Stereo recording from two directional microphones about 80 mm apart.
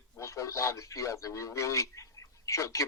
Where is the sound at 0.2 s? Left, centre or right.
Left.